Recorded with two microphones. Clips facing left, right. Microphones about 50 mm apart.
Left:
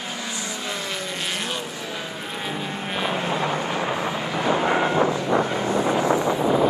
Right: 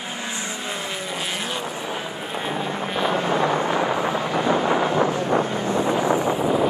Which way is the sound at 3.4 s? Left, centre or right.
Right.